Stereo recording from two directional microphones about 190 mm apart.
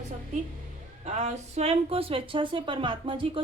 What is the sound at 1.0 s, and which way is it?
A woman's voice, 35° right (ahead or behind).